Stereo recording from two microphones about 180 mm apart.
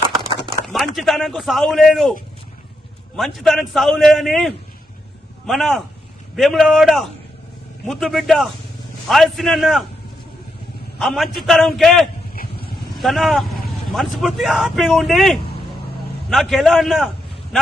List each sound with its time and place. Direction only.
0.2 s a sound: 25° right (ahead or behind)
0.6 s speech: centre (ahead or behind)
3.2 s a man's voice: centre (ahead or behind)
11.0 s a man's voice: centre (ahead or behind)
12.4 s vehicle: 60° left (ahead or behind)
13.0 s a man's voice: centre (ahead or behind)